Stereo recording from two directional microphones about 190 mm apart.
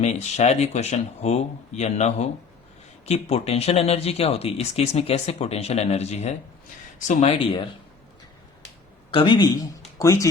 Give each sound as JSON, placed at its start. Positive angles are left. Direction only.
{"t": 0.0, "sound": "speech", "side_deg": 35}
{"t": 9.1, "sound": "speech", "side_deg": 25}